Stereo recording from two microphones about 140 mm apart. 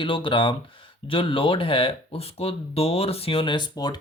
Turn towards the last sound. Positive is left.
turn(degrees=30)  # may be behind; listen again after turning